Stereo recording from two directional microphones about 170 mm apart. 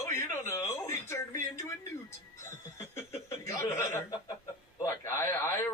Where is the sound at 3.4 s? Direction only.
15° left (ahead or behind).